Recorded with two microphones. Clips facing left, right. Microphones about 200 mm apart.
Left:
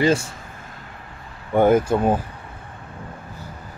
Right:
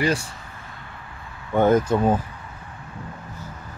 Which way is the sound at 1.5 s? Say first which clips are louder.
Left 2 dB; 10° left (ahead or behind).